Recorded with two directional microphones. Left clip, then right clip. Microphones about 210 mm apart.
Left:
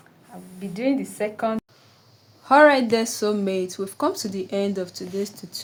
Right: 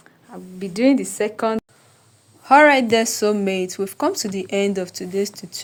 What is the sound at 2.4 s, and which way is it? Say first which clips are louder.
Speech: right 2 dB; 15° right (ahead or behind).